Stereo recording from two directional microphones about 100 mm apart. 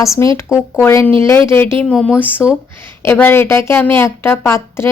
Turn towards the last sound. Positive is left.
turn(degrees=25)  # may be behind; listen again after turning